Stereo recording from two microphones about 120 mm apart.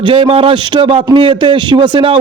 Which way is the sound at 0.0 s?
45° right (ahead or behind).